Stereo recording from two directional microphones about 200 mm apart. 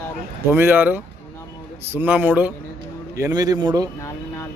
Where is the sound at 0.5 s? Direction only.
10° right (ahead or behind).